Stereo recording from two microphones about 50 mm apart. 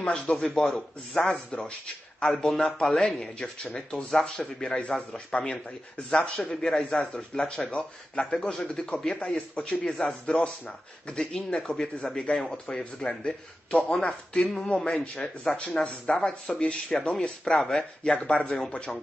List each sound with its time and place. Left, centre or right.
0.0 s a man's voice: centre
3.9 s a man's voice: centre
9.3 s a man's voice: centre